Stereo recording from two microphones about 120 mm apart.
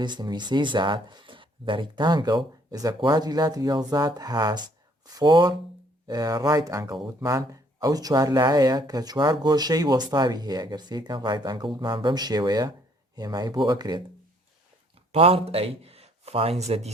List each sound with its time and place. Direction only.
0.0 s speech: 35° right (ahead or behind)
15.1 s speech: 55° right (ahead or behind)